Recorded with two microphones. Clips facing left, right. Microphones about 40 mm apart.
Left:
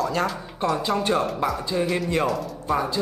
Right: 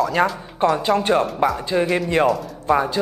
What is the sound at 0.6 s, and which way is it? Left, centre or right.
Speech, right.